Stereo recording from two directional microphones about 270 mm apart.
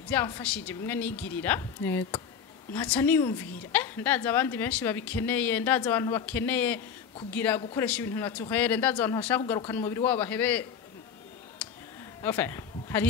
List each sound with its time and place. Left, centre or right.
0.1 s a woman's voice: centre
12.2 s speech: centre